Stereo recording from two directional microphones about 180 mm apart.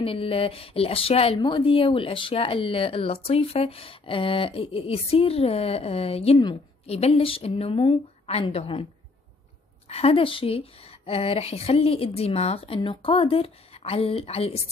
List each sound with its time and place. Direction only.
0.0 s speech: 30° left (ahead or behind)
9.8 s speech: 35° left (ahead or behind)